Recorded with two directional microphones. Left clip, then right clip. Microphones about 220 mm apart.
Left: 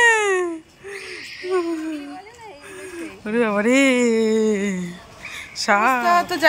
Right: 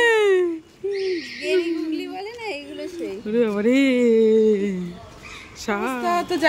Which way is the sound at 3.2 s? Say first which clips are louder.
Left 1 dB; centre (ahead or behind).